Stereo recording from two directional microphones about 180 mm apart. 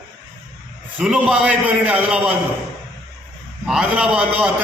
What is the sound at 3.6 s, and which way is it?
Speech, 5° right (ahead or behind).